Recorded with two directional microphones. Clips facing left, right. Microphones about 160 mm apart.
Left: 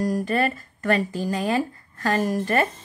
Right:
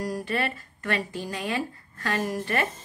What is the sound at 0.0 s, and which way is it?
Speech, 45° left (ahead or behind).